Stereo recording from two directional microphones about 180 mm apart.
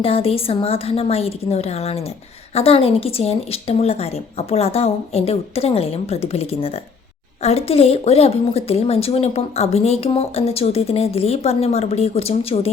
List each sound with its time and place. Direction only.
0.0 s a woman's voice: 30° left (ahead or behind)